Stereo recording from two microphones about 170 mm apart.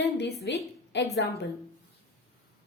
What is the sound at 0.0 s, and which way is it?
A woman's voice, 80° left.